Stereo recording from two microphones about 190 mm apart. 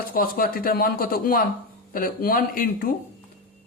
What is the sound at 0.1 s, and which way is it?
Speech, 50° left (ahead or behind).